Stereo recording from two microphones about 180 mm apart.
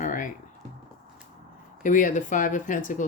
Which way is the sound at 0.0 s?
45° left (ahead or behind).